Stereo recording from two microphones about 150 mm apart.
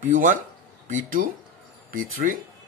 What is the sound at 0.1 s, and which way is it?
A man's voice, 60° right (ahead or behind).